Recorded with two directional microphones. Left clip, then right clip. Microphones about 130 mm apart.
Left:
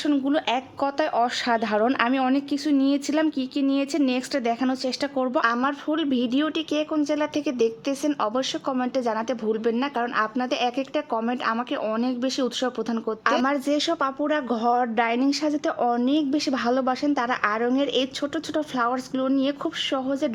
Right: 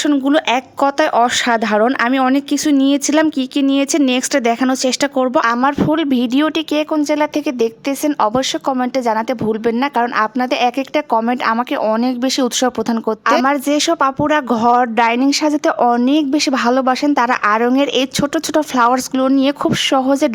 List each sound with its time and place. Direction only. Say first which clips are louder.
0.3 s a woman's voice: right 9 dB; 50° right (ahead or behind)